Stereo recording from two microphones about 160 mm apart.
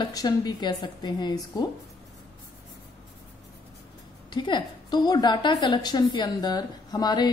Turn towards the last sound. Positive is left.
turn(degrees=25)  # may be behind; listen again after turning